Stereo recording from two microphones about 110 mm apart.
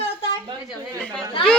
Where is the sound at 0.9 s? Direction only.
10° left (ahead or behind).